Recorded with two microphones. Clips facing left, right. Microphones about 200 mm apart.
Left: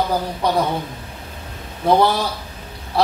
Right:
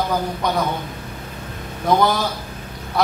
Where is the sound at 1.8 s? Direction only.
30° left (ahead or behind).